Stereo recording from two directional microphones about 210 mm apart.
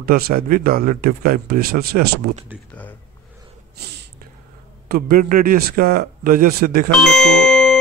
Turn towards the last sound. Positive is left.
turn(degrees=5)  # may be behind; listen again after turning